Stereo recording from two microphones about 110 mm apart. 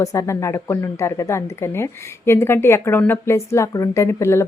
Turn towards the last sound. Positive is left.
turn(degrees=25)  # may be behind; listen again after turning